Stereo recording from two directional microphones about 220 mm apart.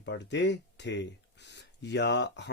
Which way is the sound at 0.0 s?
50° left (ahead or behind).